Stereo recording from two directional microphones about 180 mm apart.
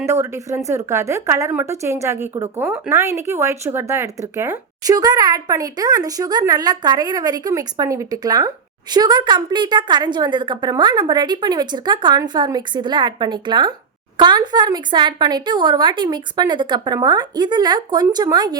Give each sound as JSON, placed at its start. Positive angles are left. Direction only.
{"t": 0.0, "sound": "a woman's voice", "side_deg": -15}